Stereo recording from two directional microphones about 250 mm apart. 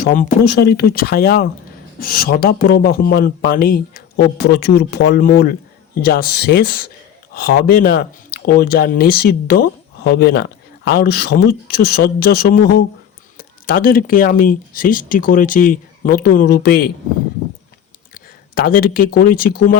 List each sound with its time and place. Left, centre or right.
0.1 s speech: left
18.1 s speech: left